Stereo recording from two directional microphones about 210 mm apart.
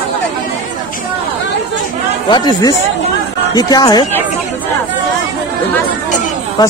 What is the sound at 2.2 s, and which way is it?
Speech, 20° left (ahead or behind).